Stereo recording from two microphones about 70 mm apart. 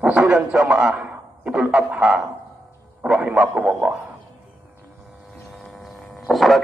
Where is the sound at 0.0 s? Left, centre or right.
Centre.